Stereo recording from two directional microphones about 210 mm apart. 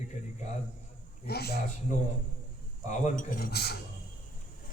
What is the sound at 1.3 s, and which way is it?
Speech, 50° left (ahead or behind).